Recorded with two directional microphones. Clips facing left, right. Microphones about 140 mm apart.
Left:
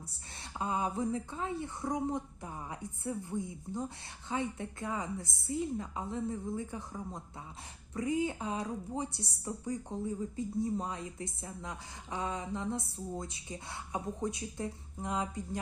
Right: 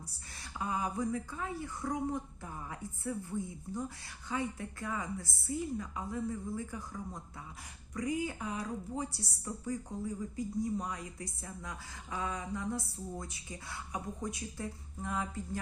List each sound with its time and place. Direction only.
0.3 s a woman's voice: 25° left (ahead or behind)